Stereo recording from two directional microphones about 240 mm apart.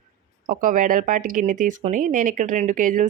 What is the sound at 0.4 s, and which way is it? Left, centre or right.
Speech, right.